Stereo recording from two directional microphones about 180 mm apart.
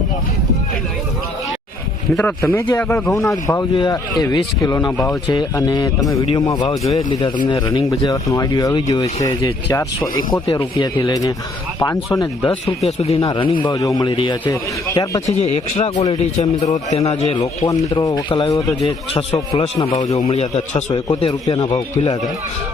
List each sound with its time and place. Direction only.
2.1 s speech: 10° left (ahead or behind)
12.6 s a man's voice: 35° left (ahead or behind); by 15.2 s 20° left (ahead or behind)
15.3 s a man's voice: 35° left (ahead or behind)
17.7 s a man's voice: 20° left (ahead or behind)